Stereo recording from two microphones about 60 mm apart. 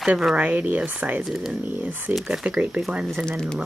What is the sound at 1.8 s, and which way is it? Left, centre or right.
Speech, right.